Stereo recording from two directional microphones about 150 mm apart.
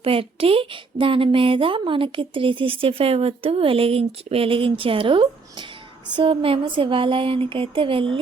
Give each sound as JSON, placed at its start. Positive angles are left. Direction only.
{"t": 0.0, "sound": "speech", "side_deg": -40}